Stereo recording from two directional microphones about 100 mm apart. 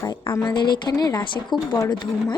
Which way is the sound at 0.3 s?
50° left (ahead or behind).